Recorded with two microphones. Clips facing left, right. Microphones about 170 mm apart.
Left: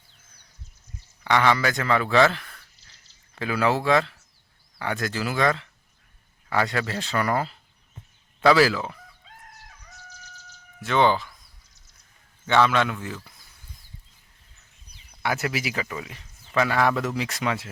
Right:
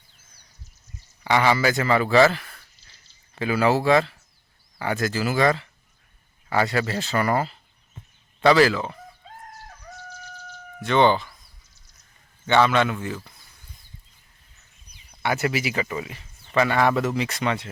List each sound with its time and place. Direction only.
1.2 s speech: 5° right (ahead or behind)
9.2 s chicken: 40° right (ahead or behind)
10.8 s speech: centre (ahead or behind)
12.5 s speech: centre (ahead or behind)
15.1 s speech: centre (ahead or behind)